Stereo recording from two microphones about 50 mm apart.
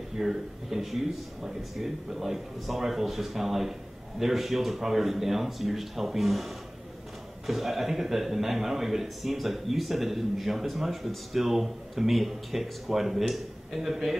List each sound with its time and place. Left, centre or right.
0.2 s a man's voice: centre